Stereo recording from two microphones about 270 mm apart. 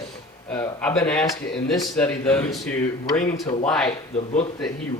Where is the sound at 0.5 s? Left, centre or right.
Centre.